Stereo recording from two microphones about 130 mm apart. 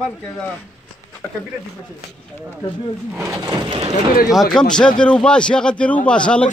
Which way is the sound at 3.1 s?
15° right (ahead or behind).